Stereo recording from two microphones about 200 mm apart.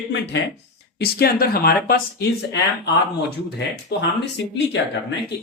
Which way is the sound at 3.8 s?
60° left (ahead or behind).